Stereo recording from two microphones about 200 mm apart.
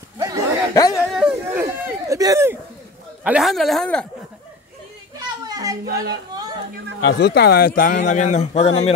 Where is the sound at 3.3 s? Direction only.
Centre (ahead or behind).